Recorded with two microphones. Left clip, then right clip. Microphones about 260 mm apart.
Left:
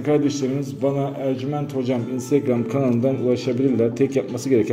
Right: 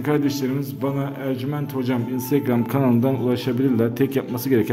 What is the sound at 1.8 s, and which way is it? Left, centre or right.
A man's voice, centre.